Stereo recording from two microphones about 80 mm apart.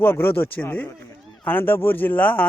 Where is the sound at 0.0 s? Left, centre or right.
Left.